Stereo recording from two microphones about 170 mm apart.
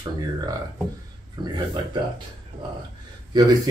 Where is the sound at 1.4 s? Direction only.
25° right (ahead or behind).